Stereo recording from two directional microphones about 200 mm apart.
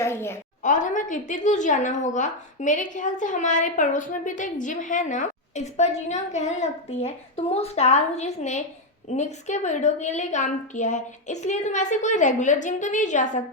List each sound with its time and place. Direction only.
0.0 s a woman's voice: 10° left (ahead or behind)
0.6 s speech: 40° left (ahead or behind)